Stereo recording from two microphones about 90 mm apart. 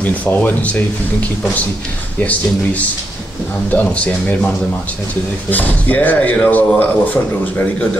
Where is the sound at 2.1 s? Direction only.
15° left (ahead or behind).